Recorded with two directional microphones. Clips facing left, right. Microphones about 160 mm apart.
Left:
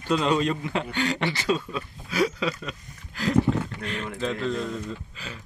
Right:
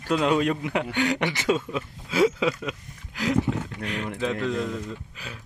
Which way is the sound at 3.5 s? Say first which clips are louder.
Left 3 dB; 75° left (ahead or behind).